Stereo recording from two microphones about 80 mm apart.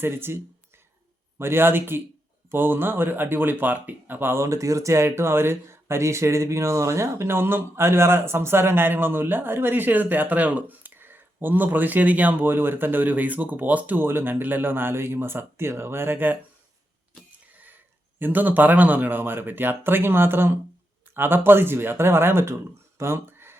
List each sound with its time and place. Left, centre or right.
0.0 s speech: right
18.2 s speech: right
23.0 s a sound: right